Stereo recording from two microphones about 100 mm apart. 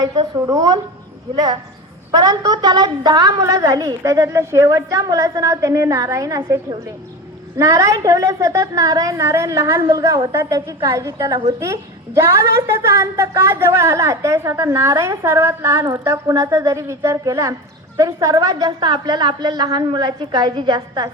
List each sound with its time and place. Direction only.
0.0 s a woman's voice: 35° right (ahead or behind)
2.1 s a woman's voice: 35° right (ahead or behind)
10.9 s a woman's voice: 35° right (ahead or behind)